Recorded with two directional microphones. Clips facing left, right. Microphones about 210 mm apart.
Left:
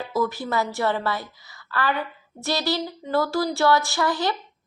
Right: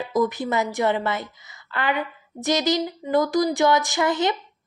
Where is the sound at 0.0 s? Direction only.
20° right (ahead or behind).